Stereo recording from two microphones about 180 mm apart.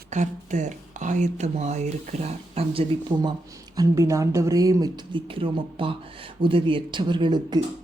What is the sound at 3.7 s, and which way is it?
A woman's voice, 15° right (ahead or behind).